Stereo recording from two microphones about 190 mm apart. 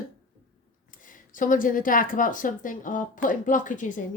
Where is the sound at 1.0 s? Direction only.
45° left (ahead or behind).